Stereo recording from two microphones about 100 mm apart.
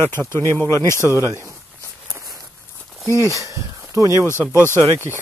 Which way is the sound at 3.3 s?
30° right (ahead or behind).